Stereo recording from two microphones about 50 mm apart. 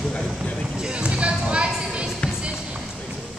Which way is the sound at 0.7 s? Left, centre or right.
Centre.